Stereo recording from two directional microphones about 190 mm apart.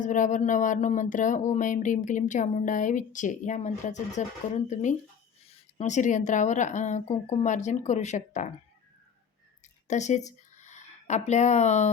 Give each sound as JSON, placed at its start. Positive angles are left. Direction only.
{"t": 0.0, "sound": "speech", "side_deg": 40}
{"t": 9.8, "sound": "speech", "side_deg": 40}